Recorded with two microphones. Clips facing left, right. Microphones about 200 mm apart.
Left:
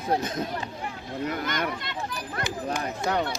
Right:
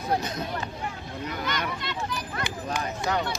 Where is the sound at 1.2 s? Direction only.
50° left (ahead or behind).